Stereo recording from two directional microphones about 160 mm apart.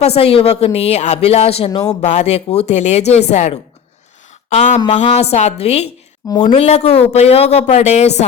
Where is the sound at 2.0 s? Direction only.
45° left (ahead or behind).